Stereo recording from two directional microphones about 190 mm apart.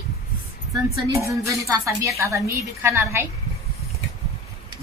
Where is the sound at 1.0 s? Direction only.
15° right (ahead or behind).